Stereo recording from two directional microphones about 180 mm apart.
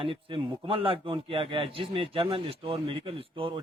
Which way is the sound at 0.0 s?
30° right (ahead or behind).